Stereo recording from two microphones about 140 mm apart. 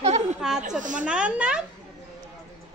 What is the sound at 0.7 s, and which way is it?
Speech, 65° right (ahead or behind).